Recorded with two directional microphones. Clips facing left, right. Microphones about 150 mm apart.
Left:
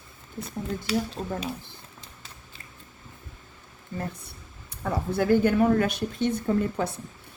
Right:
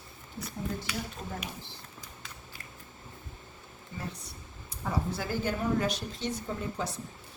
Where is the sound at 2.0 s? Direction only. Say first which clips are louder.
Right 1 dB; 25° left (ahead or behind).